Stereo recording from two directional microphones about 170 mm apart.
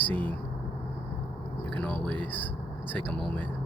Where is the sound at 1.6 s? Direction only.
10° left (ahead or behind).